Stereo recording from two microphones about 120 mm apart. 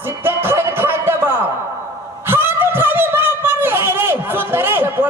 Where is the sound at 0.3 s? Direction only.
20° right (ahead or behind).